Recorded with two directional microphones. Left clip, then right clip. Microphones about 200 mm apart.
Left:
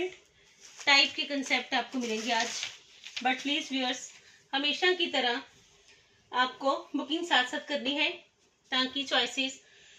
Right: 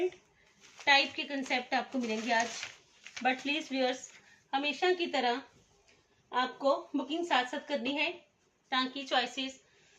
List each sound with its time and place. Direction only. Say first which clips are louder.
0.9 s speech: left 3 dB; 20° right (ahead or behind)
6.3 s speech: left 1 dB; 10° right (ahead or behind)